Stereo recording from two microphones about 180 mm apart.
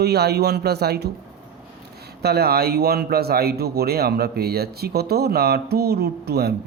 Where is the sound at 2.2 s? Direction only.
60° right (ahead or behind).